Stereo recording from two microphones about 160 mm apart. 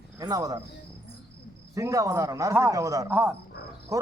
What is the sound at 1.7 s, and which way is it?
Speech, 20° right (ahead or behind).